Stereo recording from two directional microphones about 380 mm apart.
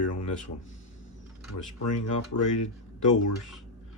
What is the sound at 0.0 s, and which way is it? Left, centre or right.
Speech, left.